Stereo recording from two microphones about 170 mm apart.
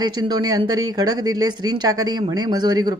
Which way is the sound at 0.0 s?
25° right (ahead or behind).